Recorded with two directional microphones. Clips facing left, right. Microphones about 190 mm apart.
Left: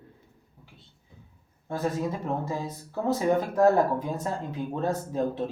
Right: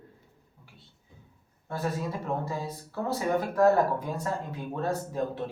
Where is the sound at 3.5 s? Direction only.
20° left (ahead or behind).